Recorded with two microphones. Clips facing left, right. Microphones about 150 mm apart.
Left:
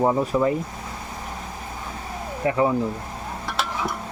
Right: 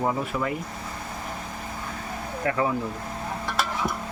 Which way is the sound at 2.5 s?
20° left (ahead or behind).